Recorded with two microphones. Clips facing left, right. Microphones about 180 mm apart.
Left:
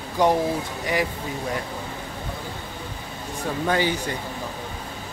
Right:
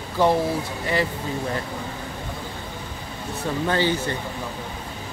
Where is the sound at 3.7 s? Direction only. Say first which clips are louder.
Even; 15° left (ahead or behind).